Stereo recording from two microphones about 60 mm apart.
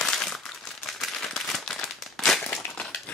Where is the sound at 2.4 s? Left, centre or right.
Left.